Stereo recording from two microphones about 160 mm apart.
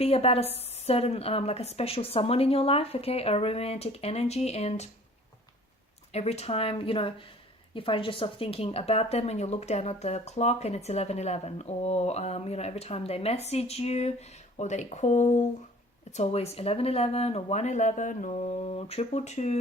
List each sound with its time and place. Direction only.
0.0 s a woman's voice: 40° left (ahead or behind)
6.1 s a woman's voice: 40° left (ahead or behind)